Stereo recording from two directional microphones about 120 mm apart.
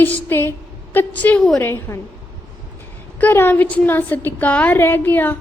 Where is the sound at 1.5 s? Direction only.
25° left (ahead or behind).